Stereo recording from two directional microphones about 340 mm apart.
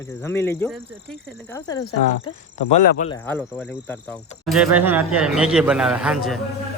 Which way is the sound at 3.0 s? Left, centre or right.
Left.